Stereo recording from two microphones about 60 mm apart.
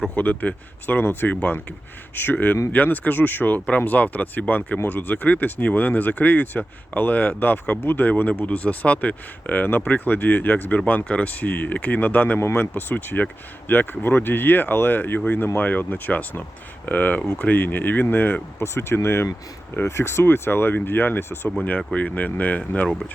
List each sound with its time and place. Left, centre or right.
0.1 s speech: left
12.4 s speech: left
21.9 s speech: left